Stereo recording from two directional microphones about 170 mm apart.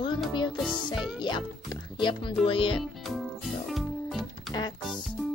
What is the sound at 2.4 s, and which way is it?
Speech, 30° left (ahead or behind).